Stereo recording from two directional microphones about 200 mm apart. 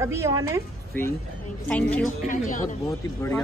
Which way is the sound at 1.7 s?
5° left (ahead or behind).